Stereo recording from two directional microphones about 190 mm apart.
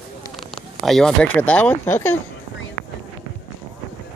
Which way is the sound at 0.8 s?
Centre (ahead or behind).